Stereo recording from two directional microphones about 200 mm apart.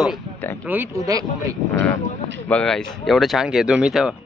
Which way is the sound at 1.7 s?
5° left (ahead or behind).